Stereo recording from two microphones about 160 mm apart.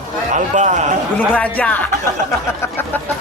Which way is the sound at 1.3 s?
10° left (ahead or behind).